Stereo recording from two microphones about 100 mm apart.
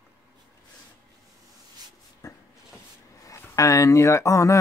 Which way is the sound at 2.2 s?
35° left (ahead or behind).